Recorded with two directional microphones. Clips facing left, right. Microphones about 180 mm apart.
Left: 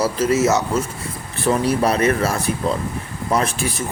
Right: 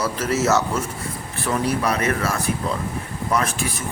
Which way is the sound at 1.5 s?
35° left (ahead or behind).